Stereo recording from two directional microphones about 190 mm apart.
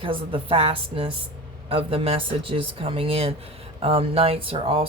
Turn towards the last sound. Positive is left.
turn(degrees=-30)  # may be behind; listen again after turning